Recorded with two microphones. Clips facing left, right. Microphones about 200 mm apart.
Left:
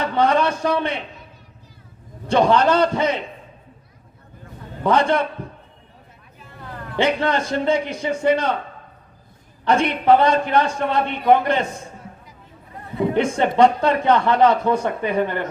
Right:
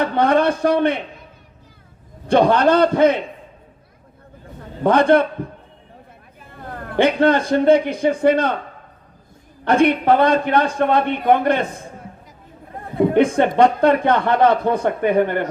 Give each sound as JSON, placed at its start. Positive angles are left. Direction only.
{"t": 0.0, "sound": "speech", "side_deg": -55}
{"t": 2.3, "sound": "a man's voice", "side_deg": -55}
{"t": 4.8, "sound": "a man's voice", "side_deg": -55}
{"t": 6.5, "sound": "a man's voice", "side_deg": -50}
{"t": 9.6, "sound": "a man's voice", "side_deg": -55}
{"t": 13.0, "sound": "speech", "side_deg": -55}